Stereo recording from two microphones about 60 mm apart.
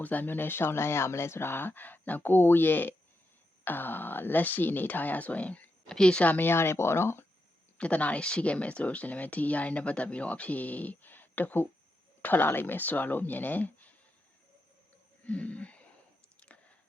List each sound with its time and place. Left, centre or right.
0.0 s speech: left
5.9 s speech: centre
6.4 s speech: left
7.8 s speech: left
15.2 s a sound: left